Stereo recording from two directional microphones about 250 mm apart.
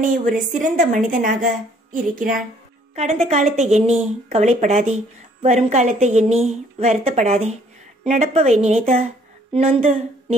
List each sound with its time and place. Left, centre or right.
0.0 s a woman's voice: right